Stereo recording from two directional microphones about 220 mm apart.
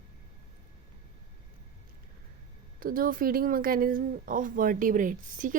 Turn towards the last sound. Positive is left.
turn(degrees=-35)  # may be behind; listen again after turning